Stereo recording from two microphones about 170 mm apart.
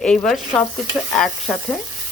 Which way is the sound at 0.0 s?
5° left (ahead or behind).